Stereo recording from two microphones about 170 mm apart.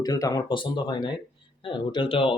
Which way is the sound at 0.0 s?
20° left (ahead or behind).